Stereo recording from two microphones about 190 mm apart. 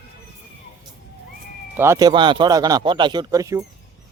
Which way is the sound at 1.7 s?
15° right (ahead or behind).